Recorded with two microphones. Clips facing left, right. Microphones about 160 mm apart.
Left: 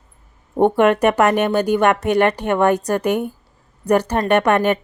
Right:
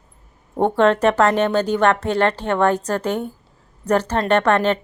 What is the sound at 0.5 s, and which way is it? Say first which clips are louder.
A woman's voice: left 2 dB; 15° left (ahead or behind).